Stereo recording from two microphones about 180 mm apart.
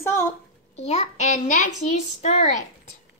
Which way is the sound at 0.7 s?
35° left (ahead or behind).